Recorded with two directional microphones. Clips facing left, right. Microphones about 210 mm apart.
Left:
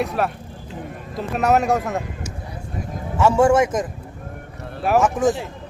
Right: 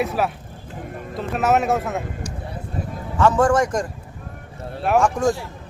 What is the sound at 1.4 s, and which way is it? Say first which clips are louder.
Speech: left 1 dB; centre (ahead or behind).